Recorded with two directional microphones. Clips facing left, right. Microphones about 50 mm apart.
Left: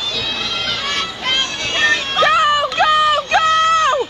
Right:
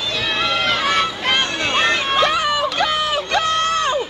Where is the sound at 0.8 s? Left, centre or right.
Centre.